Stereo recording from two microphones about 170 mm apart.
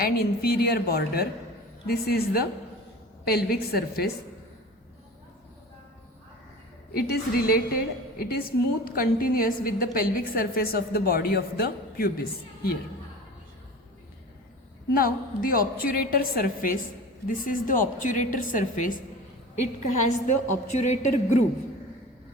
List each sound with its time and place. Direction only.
0.0 s a woman's voice: 65° left (ahead or behind)
6.9 s a woman's voice: 65° left (ahead or behind)
14.9 s a woman's voice: 60° left (ahead or behind)